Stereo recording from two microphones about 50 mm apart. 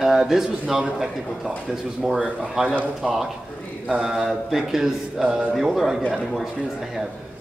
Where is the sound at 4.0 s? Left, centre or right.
Centre.